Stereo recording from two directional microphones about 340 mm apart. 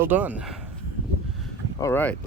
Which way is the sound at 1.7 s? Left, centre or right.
Centre.